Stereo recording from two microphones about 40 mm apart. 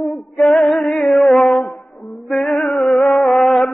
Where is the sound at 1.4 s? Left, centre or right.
Left.